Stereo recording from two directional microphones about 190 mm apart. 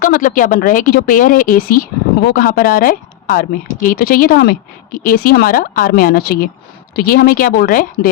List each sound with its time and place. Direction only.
0.0 s speech: 45° left (ahead or behind)